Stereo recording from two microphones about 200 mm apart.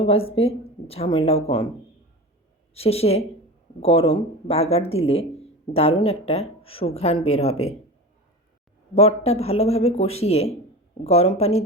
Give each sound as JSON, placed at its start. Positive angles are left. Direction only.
{"t": 0.0, "sound": "speech", "side_deg": 30}
{"t": 2.7, "sound": "speech", "side_deg": 30}
{"t": 9.0, "sound": "speech", "side_deg": 30}